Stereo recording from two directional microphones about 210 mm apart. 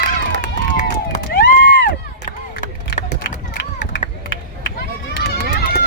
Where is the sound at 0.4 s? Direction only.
35° left (ahead or behind).